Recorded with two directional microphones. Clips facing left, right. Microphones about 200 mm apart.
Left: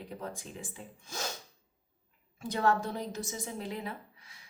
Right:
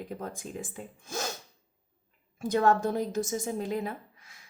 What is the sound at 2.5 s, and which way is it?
A woman's voice, 45° right (ahead or behind).